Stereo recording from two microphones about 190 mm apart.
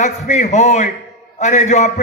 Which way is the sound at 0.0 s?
35° left (ahead or behind).